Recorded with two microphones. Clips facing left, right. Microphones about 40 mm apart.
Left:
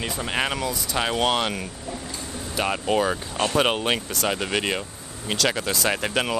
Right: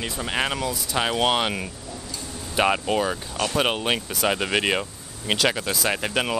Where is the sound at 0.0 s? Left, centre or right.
Centre.